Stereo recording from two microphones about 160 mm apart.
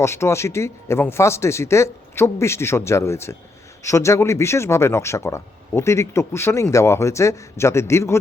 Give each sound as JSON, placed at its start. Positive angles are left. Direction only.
{"t": 0.0, "sound": "speech", "side_deg": 15}